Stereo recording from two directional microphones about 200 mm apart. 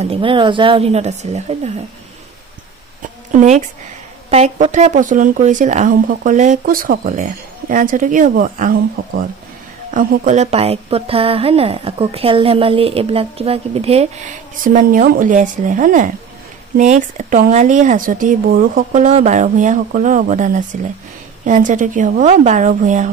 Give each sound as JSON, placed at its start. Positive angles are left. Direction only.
{"t": 0.0, "sound": "speech", "side_deg": -25}
{"t": 3.3, "sound": "speech", "side_deg": -40}